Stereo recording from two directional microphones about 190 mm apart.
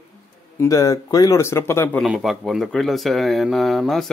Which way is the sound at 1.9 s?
Centre (ahead or behind).